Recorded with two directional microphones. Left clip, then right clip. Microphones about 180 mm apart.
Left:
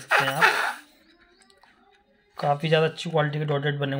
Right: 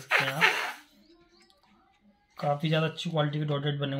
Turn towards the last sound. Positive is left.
turn(degrees=30)  # may be behind; listen again after turning